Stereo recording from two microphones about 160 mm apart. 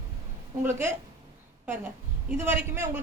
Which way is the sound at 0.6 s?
15° right (ahead or behind).